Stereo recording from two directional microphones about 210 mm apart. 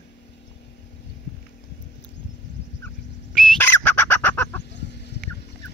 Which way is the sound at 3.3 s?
5° left (ahead or behind).